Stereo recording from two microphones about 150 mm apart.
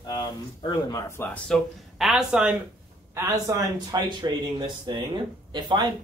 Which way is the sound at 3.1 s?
20° right (ahead or behind).